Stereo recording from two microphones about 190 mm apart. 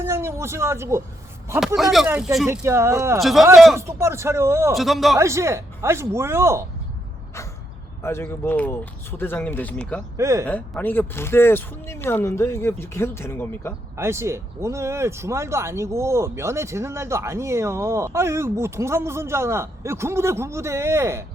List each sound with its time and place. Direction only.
0.0 s a man's voice: 15° right (ahead or behind)
1.5 s a man's voice: centre (ahead or behind)
2.5 s speech: 15° right (ahead or behind)
3.2 s a man's voice: centre (ahead or behind)
3.8 s speech: 15° right (ahead or behind)
4.7 s a man's voice: centre (ahead or behind)
5.1 s speech: 15° right (ahead or behind)
8.0 s speech: 10° left (ahead or behind)
10.2 s speech: 15° right (ahead or behind)
10.4 s speech: 10° left (ahead or behind)
13.9 s speech: 15° right (ahead or behind)